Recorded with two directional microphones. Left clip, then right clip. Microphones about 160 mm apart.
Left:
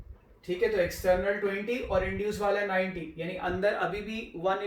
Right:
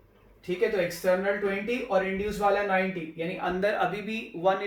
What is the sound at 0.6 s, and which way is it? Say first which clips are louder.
Speech: right 1 dB; 5° right (ahead or behind).